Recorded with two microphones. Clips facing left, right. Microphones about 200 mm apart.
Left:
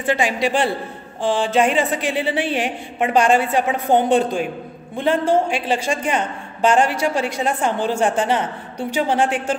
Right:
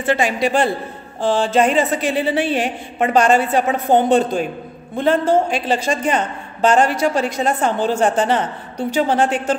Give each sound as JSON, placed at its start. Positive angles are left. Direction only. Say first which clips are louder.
{"t": 0.0, "sound": "a woman's voice", "louder": "right 2 dB", "side_deg": 15}
{"t": 0.4, "sound": "a man's voice", "louder": "right 2 dB", "side_deg": -45}
{"t": 1.6, "sound": "a woman's voice", "louder": "right 2 dB", "side_deg": 10}